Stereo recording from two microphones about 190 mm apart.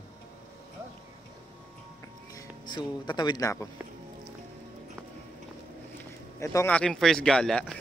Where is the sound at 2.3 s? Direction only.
20° left (ahead or behind).